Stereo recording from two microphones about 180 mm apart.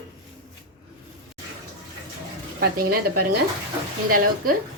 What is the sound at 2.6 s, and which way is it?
Speech, 55° right (ahead or behind).